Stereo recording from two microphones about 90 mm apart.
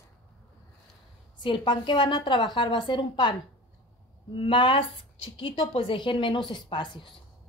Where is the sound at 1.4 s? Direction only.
60° left (ahead or behind).